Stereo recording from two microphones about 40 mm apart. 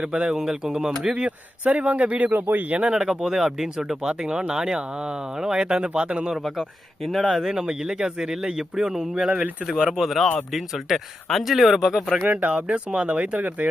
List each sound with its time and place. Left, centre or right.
0.0 s speech: right
1.1 s speech: right
2.3 s speech: right
2.6 s speech: right
2.9 s speech: centre
6.3 s speech: centre
7.3 s speech: centre
12.3 s speech: right